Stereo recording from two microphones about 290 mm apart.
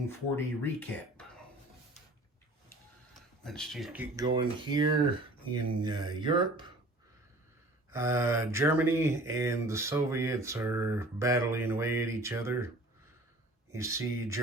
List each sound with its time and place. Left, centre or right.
0.1 s speech: centre
3.2 s speech: centre
7.9 s speech: centre